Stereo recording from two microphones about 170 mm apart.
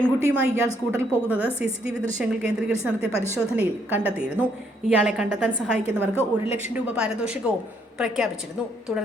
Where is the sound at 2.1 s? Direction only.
5° right (ahead or behind).